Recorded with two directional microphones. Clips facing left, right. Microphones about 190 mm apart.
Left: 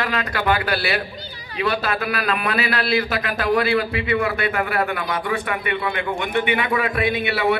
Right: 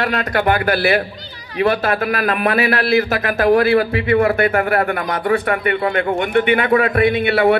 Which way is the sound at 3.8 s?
50° right (ahead or behind).